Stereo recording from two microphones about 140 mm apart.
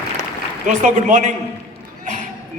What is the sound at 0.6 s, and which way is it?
Speech, 60° right (ahead or behind).